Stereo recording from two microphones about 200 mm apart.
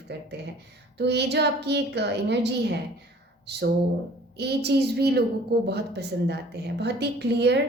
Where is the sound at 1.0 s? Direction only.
55° right (ahead or behind).